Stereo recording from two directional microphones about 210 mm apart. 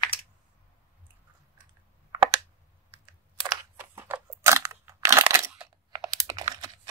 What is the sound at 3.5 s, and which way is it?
Crunch, 10° right (ahead or behind).